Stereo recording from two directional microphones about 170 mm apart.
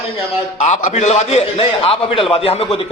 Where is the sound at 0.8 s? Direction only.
40° left (ahead or behind).